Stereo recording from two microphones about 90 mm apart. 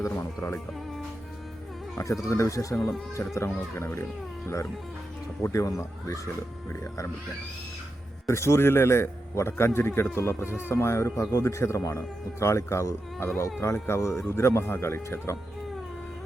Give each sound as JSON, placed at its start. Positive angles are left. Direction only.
{"t": 0.3, "sound": "a man's voice", "side_deg": 30}
{"t": 2.0, "sound": "a man's voice", "side_deg": 35}
{"t": 5.4, "sound": "speech", "side_deg": 35}
{"t": 8.3, "sound": "a man's voice", "side_deg": 30}